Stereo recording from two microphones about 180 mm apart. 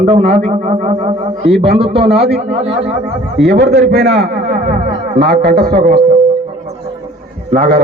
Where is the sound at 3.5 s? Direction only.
70° right (ahead or behind).